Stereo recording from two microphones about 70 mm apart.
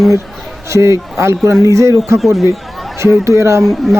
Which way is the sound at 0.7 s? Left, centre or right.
Right.